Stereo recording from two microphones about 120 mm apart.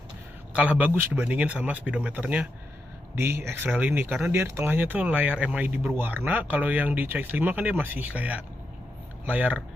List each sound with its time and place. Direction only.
0.5 s speech: 10° right (ahead or behind)